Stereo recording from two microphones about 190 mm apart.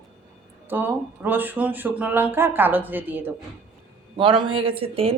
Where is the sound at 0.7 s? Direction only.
10° right (ahead or behind).